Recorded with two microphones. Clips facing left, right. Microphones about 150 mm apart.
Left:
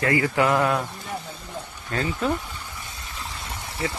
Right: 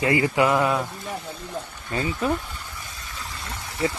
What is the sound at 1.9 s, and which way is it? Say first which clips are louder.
Speech: even; 10° right (ahead or behind).